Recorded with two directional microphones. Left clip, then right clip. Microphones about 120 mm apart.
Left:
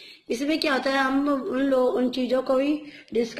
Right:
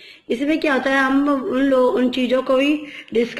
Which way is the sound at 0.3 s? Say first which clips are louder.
Right 5 dB; 20° left (ahead or behind).